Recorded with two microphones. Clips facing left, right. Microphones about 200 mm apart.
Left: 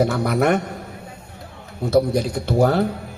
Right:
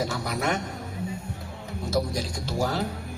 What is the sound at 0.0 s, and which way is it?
Speech, 60° left (ahead or behind).